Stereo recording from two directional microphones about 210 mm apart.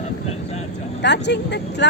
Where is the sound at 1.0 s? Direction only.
55° left (ahead or behind).